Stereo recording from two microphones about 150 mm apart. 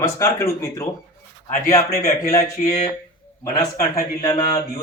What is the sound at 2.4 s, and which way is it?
Speech, 50° left (ahead or behind).